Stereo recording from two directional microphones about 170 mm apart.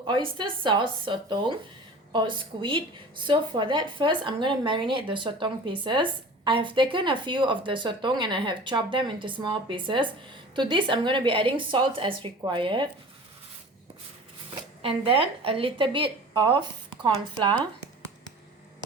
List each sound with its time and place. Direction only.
0.1 s a woman's voice: 30° right (ahead or behind)
14.8 s speech: 35° right (ahead or behind)